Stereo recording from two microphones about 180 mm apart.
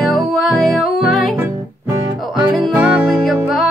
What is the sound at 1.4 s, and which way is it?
Music, 20° right (ahead or behind).